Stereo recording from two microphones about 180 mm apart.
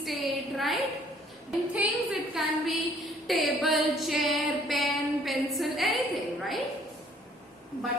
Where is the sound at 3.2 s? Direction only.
Centre (ahead or behind).